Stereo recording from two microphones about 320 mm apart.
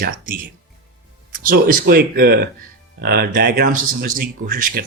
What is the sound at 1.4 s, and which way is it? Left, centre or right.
Speech, right.